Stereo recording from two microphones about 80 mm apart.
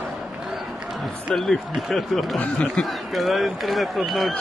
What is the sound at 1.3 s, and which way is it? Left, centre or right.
A man's voice, centre.